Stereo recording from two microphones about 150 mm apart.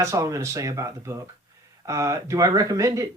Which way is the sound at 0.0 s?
20° right (ahead or behind).